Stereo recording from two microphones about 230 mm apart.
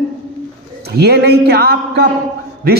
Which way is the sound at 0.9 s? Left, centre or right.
Right.